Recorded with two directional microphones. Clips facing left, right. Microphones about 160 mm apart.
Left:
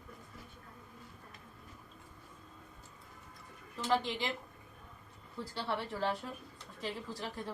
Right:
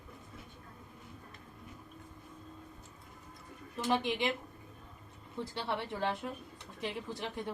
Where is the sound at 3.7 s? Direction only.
20° right (ahead or behind).